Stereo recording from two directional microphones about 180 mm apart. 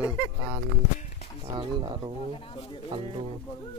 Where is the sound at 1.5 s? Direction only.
25° right (ahead or behind).